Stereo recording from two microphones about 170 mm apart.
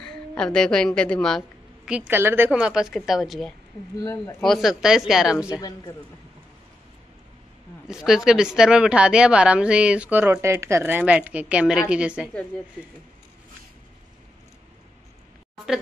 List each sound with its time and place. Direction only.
0.3 s a woman's voice: 5° left (ahead or behind)
1.9 s a woman's voice: 10° right (ahead or behind)
4.0 s speech: 20° left (ahead or behind)
4.4 s a woman's voice: centre (ahead or behind)
5.5 s speech: 20° left (ahead or behind)
7.9 s a woman's voice: 5° right (ahead or behind)